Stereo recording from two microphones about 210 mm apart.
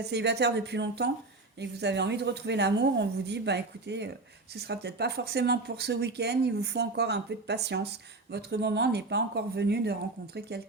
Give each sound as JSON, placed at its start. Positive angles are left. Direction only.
{"t": 0.1, "sound": "a woman's voice", "side_deg": -55}